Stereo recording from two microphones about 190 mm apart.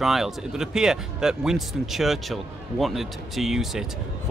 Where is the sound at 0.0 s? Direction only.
Centre (ahead or behind).